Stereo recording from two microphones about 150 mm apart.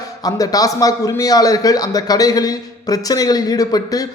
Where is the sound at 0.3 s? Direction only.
25° left (ahead or behind).